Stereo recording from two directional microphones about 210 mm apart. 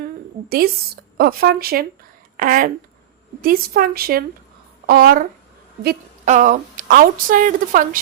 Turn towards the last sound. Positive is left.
turn(degrees=-40)  # may be behind; listen again after turning